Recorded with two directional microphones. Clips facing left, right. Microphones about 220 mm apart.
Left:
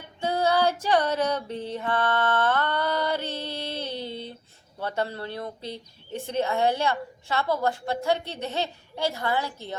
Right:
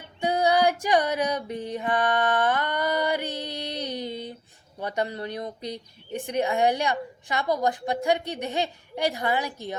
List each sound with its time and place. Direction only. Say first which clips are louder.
0.2 s female singing: right 1 dB; 15° right (ahead or behind)
4.8 s speech: right 1 dB; 15° right (ahead or behind)